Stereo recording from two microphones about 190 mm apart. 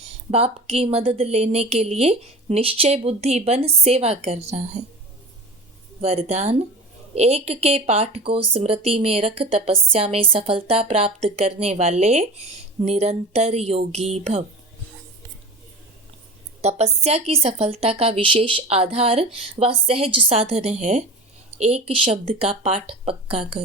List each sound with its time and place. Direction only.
0.3 s speech: 30° right (ahead or behind)
6.0 s speech: 35° right (ahead or behind)
16.6 s speech: 35° right (ahead or behind)